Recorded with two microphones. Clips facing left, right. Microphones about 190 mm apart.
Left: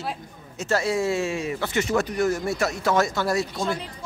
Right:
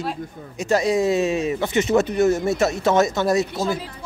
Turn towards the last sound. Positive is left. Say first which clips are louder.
# right 3 dB
turn(degrees=-5)  # may be behind; listen again after turning